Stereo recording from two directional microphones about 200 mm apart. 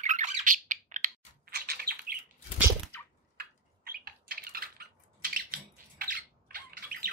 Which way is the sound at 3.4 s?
50° right (ahead or behind).